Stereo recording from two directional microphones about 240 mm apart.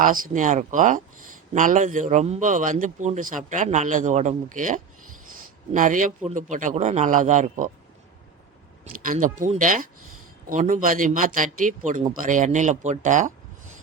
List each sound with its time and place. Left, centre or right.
0.0 s a man's voice: right
8.8 s a man's voice: right